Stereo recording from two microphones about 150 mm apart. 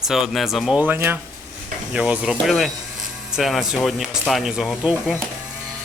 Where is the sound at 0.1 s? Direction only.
Centre (ahead or behind).